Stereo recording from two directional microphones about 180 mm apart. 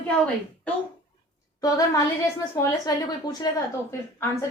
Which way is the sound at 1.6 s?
20° left (ahead or behind).